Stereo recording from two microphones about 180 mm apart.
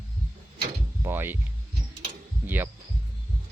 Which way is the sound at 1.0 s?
10° right (ahead or behind).